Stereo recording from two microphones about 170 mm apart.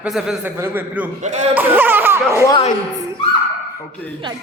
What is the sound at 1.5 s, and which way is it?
Speech, 10° right (ahead or behind).